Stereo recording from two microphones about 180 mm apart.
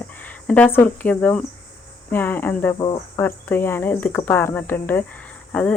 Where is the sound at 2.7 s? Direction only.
25° left (ahead or behind).